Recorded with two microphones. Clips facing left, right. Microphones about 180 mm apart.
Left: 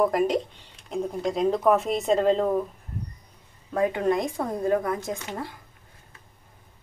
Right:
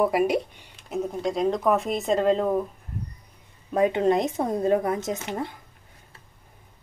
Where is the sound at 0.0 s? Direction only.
10° right (ahead or behind).